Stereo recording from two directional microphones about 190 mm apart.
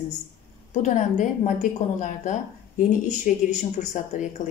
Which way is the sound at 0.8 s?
40° left (ahead or behind).